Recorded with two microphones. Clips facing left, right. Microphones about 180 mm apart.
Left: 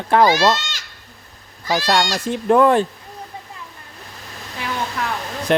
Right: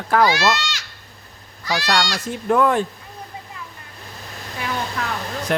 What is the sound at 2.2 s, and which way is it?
Speech, 30° left (ahead or behind).